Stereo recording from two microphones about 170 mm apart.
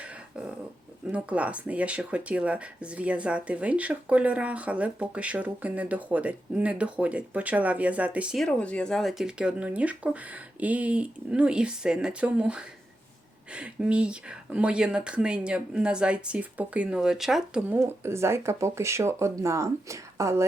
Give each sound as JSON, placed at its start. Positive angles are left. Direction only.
{"t": 0.0, "sound": "a sound", "side_deg": -5}
{"t": 1.1, "sound": "speech", "side_deg": -10}
{"t": 17.7, "sound": "speech", "side_deg": -15}